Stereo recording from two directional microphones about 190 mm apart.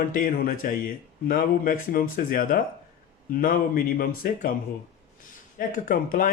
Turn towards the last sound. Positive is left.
turn(degrees=45)  # may be behind; listen again after turning